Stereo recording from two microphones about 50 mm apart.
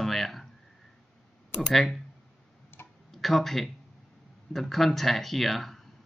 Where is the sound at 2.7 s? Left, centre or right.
Left.